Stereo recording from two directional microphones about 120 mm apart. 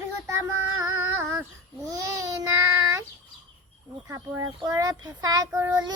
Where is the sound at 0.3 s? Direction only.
25° right (ahead or behind).